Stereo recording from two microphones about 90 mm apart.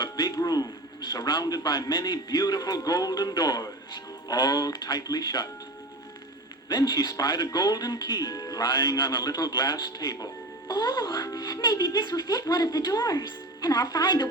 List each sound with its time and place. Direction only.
0.0 s a man's voice: 45° left (ahead or behind)
6.7 s a man's voice: 45° left (ahead or behind)
11.0 s a man's voice: 35° left (ahead or behind)